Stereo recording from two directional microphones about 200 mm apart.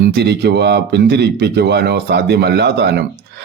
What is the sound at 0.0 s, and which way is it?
Speech, 55° right (ahead or behind).